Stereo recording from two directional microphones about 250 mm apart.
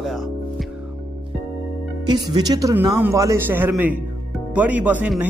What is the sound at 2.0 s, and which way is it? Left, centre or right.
Speech, centre.